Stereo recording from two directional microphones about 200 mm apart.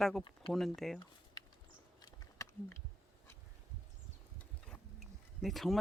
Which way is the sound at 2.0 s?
15° left (ahead or behind).